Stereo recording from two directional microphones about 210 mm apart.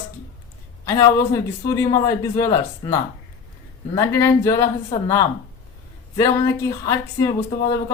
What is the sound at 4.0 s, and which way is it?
Speech, 15° left (ahead or behind).